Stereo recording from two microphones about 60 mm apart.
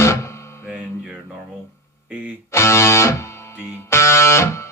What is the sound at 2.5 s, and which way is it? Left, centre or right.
Music, left.